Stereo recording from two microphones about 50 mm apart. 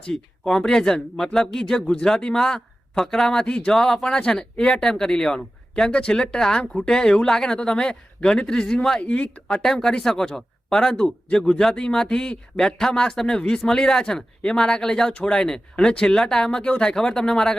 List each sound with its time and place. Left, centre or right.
0.0 s speech: centre
9.0 s speech: left
9.5 s speech: centre